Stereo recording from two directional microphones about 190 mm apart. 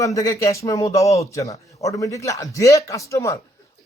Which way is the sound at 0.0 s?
15° left (ahead or behind).